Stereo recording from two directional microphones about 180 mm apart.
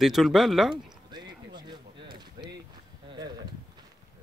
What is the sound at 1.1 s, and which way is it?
Clip-clop, 25° right (ahead or behind).